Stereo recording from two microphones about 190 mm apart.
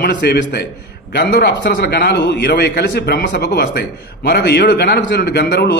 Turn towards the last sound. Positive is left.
turn(degrees=55)  # may be behind; listen again after turning